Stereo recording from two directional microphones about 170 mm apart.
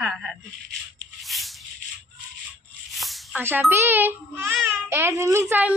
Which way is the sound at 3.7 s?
15° right (ahead or behind).